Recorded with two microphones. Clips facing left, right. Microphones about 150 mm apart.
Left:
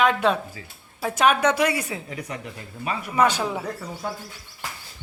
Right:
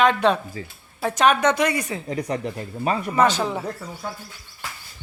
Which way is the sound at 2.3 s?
35° right (ahead or behind).